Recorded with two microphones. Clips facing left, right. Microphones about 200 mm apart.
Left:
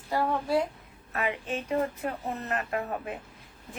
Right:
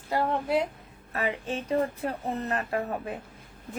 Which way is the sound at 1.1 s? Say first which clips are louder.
Right 1 dB; 30° right (ahead or behind).